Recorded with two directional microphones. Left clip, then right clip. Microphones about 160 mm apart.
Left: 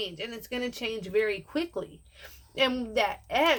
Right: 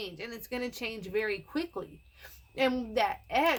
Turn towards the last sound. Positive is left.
turn(degrees=-35)  # may be behind; listen again after turning